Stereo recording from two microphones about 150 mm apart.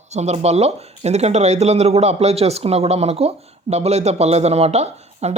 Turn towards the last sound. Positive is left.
turn(degrees=-45)  # may be behind; listen again after turning